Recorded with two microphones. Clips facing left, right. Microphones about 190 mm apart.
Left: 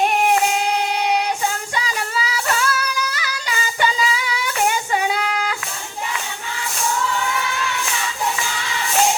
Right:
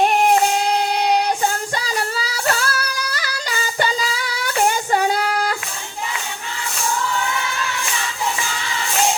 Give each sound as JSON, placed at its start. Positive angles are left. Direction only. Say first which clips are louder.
{"t": 1.7, "sound": "female singing", "louder": "right 1 dB", "side_deg": -35}
{"t": 4.6, "sound": "child singing", "louder": "right 2 dB", "side_deg": -40}